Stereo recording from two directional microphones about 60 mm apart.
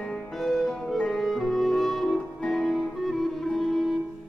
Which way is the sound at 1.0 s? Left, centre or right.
Centre.